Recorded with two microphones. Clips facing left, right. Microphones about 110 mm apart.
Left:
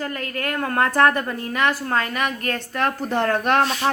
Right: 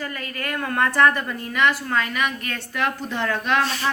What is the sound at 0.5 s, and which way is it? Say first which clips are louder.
A woman's voice: left 1 dB; 35° left (ahead or behind).